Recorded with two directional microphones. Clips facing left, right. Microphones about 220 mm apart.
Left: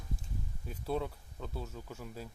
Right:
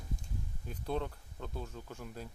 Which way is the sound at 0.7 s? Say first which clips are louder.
Left 1 dB; 5° left (ahead or behind).